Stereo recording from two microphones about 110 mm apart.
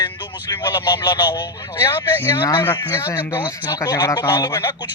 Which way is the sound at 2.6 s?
20° left (ahead or behind).